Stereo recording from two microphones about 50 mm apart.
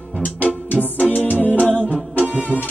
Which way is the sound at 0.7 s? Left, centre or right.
Left.